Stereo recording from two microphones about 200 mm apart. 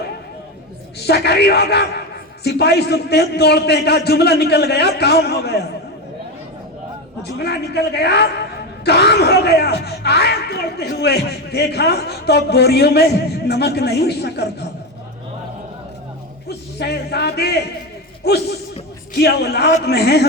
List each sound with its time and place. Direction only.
1.0 s a man's voice: 55° left (ahead or behind)
7.2 s a man's voice: 55° left (ahead or behind)
16.5 s a man's voice: 55° left (ahead or behind)